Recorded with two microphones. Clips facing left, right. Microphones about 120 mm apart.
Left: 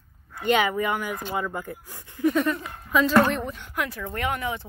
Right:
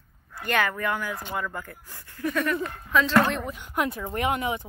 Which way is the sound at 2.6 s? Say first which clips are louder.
Left 1 dB; 10° left (ahead or behind).